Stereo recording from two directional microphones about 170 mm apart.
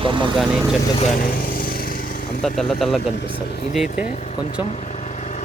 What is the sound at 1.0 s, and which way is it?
Lawn mower, 50° left (ahead or behind).